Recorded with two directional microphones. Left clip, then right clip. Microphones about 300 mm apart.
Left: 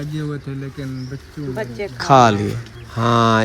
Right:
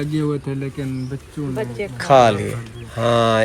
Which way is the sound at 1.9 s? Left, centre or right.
Centre.